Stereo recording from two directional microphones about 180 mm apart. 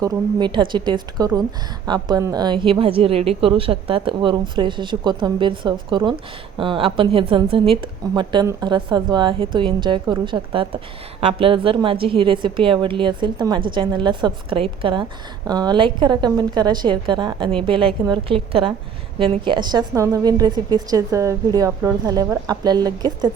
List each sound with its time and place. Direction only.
0.0 s a woman's voice: 25° right (ahead or behind)